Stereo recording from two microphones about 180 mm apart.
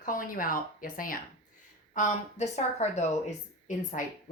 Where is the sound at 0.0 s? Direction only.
50° left (ahead or behind).